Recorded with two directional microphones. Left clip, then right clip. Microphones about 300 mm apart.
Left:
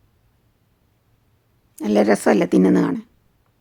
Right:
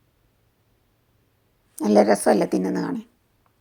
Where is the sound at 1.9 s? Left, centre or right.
Centre.